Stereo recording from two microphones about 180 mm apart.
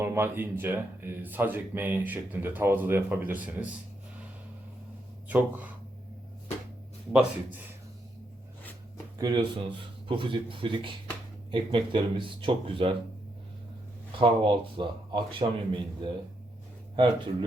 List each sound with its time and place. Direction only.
0.0 s speech: 10° right (ahead or behind)
5.3 s speech: 10° right (ahead or behind)
7.1 s a man's voice: 5° right (ahead or behind)
9.1 s speech: 25° right (ahead or behind)
14.1 s speech: 30° right (ahead or behind)